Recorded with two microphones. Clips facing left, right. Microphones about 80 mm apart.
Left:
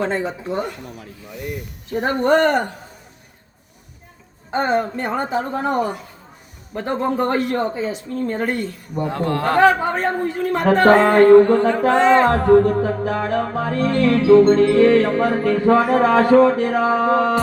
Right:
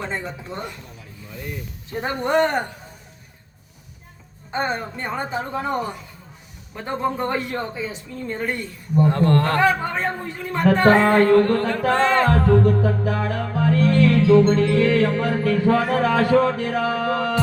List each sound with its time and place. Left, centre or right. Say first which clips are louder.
0.0 s a man's voice: left 7 dB; left
4.7 s a man's voice: left 7 dB; left
5.5 s speech: left 3 dB; left
8.1 s speech: left 4 dB; left
9.0 s music: even; centre
9.6 s a man's voice: left 5 dB; left
11.0 s music: left 5 dB; left
12.3 s music: left 4 dB; left